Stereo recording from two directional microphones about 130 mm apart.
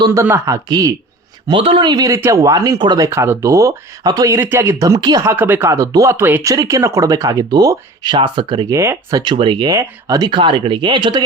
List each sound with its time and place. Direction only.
0.0 s speech: 25° right (ahead or behind)
1.5 s speech: 40° right (ahead or behind)
3.1 s speech: 20° right (ahead or behind)
4.4 s speech: 20° right (ahead or behind); by 8.6 s 40° right (ahead or behind)
8.7 s speech: 20° right (ahead or behind)
9.2 s speech: 40° right (ahead or behind)